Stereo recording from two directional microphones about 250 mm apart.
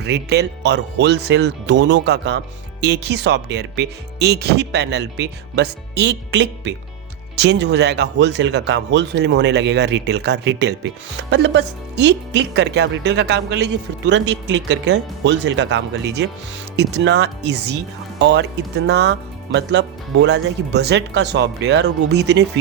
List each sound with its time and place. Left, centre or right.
0.0 s speech: right